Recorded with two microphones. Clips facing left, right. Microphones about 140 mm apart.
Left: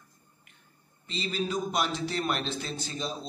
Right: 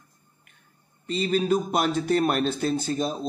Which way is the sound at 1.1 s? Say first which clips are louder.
Right 9 dB; 55° right (ahead or behind).